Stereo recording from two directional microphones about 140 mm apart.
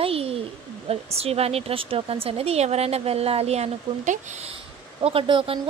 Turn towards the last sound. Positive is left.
turn(degrees=-40)  # may be behind; listen again after turning